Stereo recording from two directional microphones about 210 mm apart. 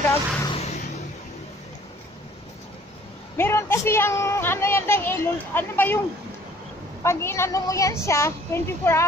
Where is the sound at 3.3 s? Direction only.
10° left (ahead or behind).